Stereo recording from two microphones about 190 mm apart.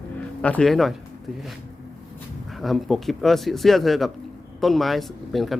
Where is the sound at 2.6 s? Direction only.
Centre (ahead or behind).